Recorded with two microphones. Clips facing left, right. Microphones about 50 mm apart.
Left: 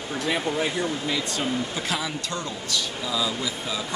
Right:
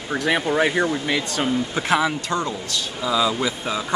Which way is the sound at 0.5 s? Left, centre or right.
Right.